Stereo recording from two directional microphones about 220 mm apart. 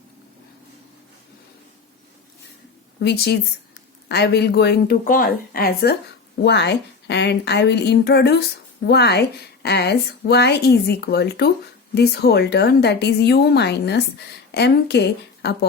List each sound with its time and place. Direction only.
3.0 s a woman's voice: 45° left (ahead or behind)